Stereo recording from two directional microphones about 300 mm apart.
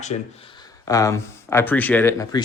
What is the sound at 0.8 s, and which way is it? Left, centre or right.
Speech, centre.